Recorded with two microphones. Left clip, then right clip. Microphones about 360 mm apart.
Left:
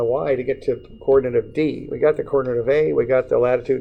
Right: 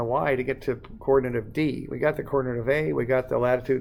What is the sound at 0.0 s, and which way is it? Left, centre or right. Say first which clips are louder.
Speech: left 5 dB; right.